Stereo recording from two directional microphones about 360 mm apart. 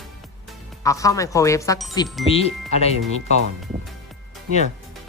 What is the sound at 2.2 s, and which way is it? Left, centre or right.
Speech, centre.